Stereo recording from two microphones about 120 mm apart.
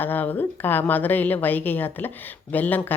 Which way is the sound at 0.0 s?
15° left (ahead or behind).